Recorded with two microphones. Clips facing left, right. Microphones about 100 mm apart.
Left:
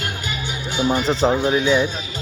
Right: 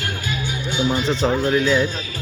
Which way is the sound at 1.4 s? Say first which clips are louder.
Even; 20° left (ahead or behind).